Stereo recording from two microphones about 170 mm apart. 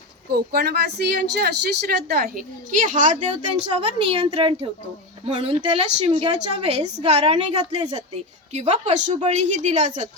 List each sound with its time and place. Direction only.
0.3 s a woman's voice: 65° right (ahead or behind); by 9.9 s 40° right (ahead or behind)